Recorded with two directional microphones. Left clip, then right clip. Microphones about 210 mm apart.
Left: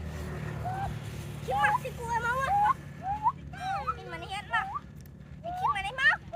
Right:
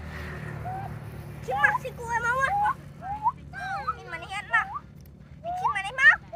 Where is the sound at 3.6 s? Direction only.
20° left (ahead or behind).